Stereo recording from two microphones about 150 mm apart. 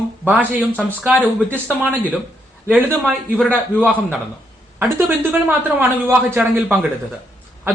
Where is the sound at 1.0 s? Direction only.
Centre (ahead or behind).